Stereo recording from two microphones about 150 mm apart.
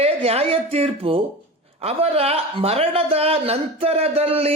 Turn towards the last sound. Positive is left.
turn(degrees=-40)  # may be behind; listen again after turning